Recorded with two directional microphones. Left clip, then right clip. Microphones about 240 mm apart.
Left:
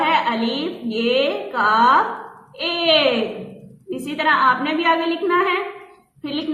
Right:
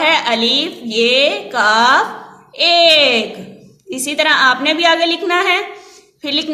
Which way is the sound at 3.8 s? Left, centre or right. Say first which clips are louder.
Right 5 dB; right.